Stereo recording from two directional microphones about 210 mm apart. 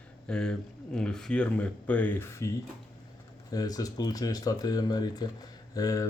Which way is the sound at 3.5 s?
15° left (ahead or behind).